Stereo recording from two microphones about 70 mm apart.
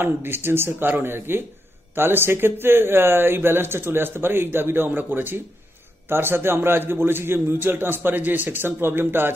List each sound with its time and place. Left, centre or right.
0.0 s speech: right